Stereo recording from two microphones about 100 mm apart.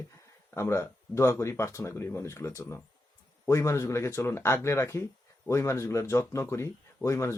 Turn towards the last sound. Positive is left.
turn(degrees=30)  # may be behind; listen again after turning